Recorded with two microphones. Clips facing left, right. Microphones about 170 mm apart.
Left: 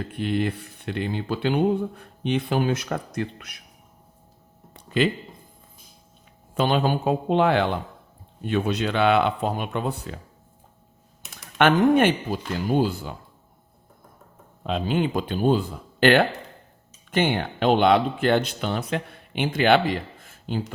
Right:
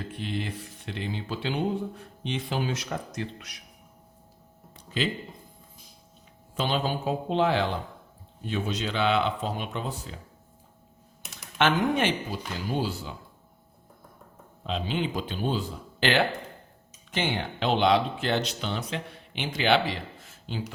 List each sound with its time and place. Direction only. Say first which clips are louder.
0.1 s speech: left 10 dB; 55° left (ahead or behind)
4.7 s a sound: left 7 dB; 60° left (ahead or behind)
6.5 s speech: left 6 dB; 55° left (ahead or behind)
11.3 s speech: left 5 dB; 55° left (ahead or behind)
14.6 s speech: left 6 dB; 55° left (ahead or behind)